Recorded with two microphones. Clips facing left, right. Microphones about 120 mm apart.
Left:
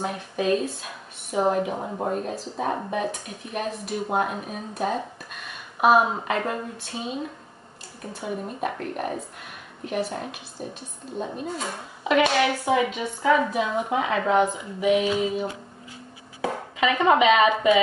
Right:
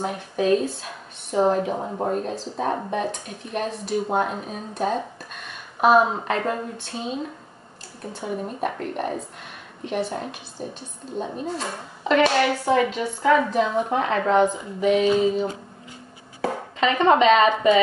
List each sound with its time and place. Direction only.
0.0 s speech: centre (ahead or behind)